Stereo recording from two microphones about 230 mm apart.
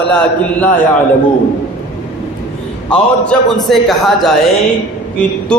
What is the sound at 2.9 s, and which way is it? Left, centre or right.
A man's voice, centre.